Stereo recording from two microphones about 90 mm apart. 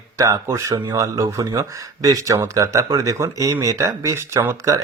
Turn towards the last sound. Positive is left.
turn(degrees=-30)  # may be behind; listen again after turning